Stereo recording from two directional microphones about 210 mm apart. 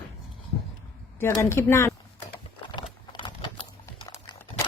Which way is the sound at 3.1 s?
25° left (ahead or behind).